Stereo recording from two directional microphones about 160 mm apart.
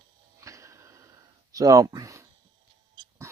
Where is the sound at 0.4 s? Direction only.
20° right (ahead or behind).